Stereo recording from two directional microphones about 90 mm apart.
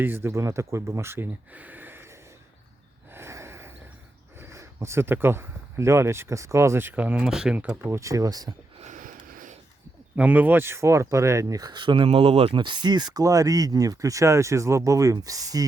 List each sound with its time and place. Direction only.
0.0 s speech: 25° right (ahead or behind)
3.1 s snort: 30° right (ahead or behind)
4.4 s speech: 30° right (ahead or behind); by 7.8 s 15° right (ahead or behind)
7.9 s speech: 35° right (ahead or behind)
10.2 s speech: 20° right (ahead or behind); by 15.6 s 40° right (ahead or behind)